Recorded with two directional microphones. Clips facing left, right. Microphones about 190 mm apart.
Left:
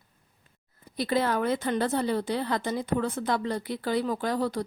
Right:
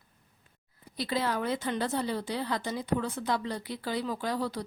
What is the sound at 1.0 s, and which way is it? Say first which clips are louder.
Speech: left 5 dB; 55° left (ahead or behind).